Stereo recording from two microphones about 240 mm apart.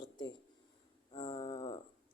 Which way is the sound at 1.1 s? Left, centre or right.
Centre.